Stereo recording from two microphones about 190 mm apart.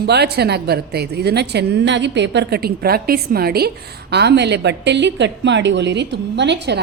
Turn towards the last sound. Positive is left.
turn(degrees=-65)  # may be behind; listen again after turning